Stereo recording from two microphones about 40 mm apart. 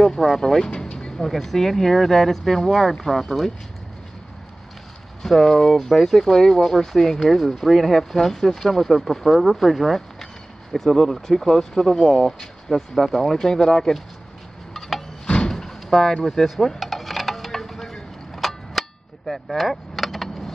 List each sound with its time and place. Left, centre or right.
0.1 s speech: centre
0.7 s vehicle: centre
1.1 s speech: centre
5.2 s speech: centre
12.9 s speech: centre
13.5 s speech: centre
14.7 s a sound: centre
15.2 s a sound: left
15.5 s slam: centre
16.3 s a sound: centre